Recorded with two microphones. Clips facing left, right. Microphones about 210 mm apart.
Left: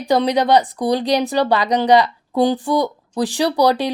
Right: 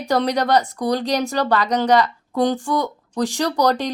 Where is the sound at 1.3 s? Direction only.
10° left (ahead or behind).